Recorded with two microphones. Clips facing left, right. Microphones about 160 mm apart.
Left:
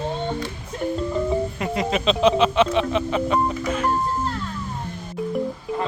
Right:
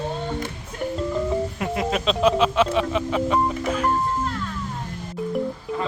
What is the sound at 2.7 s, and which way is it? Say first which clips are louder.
Speech: left 1 dB; centre (ahead or behind).